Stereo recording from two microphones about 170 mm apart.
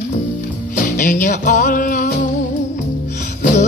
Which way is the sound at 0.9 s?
50° left (ahead or behind).